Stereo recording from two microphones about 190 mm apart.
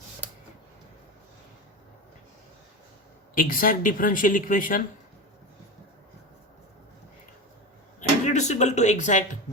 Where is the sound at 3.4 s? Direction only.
45° left (ahead or behind).